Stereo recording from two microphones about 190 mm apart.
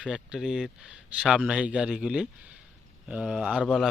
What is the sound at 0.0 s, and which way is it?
Speech, 5° right (ahead or behind).